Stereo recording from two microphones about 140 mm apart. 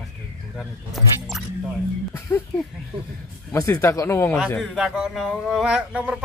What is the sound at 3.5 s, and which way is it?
Speech, 20° left (ahead or behind).